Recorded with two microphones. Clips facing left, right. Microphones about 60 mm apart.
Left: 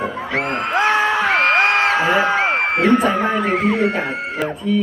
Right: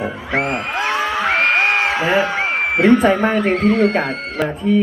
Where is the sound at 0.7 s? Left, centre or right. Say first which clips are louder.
Left 3 dB; left.